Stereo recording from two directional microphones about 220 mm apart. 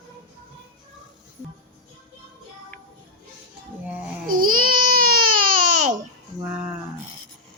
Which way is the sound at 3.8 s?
5° right (ahead or behind).